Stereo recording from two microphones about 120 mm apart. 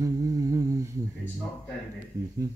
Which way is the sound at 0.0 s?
30° right (ahead or behind).